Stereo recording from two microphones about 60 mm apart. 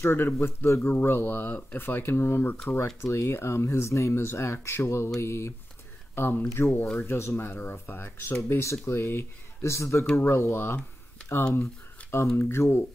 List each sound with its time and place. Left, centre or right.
0.0 s speech: left
8.5 s speech: left
11.6 s a sound: left
12.4 s speech: left